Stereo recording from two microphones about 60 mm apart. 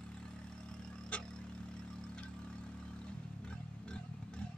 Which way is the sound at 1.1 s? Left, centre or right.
Left.